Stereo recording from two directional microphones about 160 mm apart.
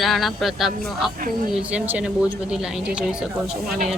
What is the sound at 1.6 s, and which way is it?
Speech, 10° right (ahead or behind).